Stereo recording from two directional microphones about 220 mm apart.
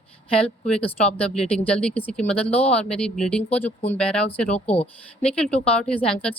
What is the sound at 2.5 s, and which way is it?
Speech, 30° left (ahead or behind).